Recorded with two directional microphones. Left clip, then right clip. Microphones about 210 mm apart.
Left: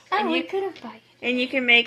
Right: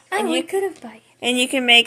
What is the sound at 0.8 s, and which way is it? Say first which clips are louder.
Speech: right 1 dB; 10° right (ahead or behind).